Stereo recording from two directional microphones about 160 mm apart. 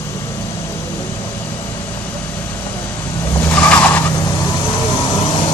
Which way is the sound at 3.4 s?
5° left (ahead or behind).